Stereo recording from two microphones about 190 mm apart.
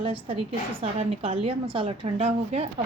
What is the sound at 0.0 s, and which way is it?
A woman's voice, 30° right (ahead or behind).